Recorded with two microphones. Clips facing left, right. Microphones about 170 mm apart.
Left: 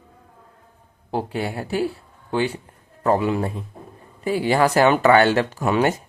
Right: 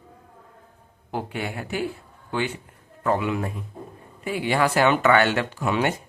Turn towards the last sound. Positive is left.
turn(degrees=40)  # may be behind; listen again after turning